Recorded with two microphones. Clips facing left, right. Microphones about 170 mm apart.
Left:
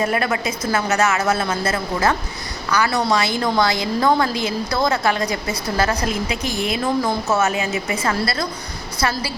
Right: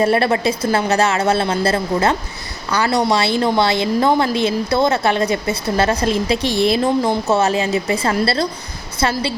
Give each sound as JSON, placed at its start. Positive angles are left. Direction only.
{"t": 0.0, "sound": "a woman's voice", "side_deg": -30}